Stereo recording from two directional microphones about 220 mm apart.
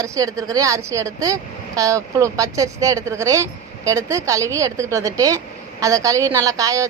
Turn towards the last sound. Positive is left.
turn(degrees=-15)  # may be behind; listen again after turning